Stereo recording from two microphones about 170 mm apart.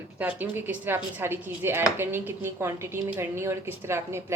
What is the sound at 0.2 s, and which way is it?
Speech, 10° right (ahead or behind).